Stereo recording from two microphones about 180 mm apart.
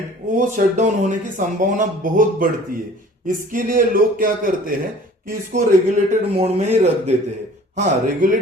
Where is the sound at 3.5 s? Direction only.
50° right (ahead or behind).